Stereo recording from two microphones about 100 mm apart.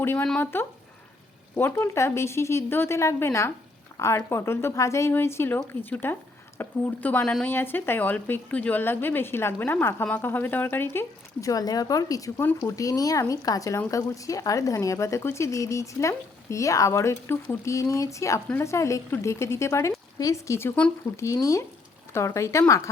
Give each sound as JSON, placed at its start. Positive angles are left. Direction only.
{"t": 0.0, "sound": "speech", "side_deg": 20}
{"t": 11.3, "sound": "speech", "side_deg": 35}
{"t": 22.1, "sound": "speech", "side_deg": 30}